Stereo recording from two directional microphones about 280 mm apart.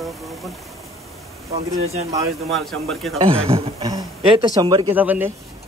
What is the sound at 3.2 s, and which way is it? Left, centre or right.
A man's voice, right.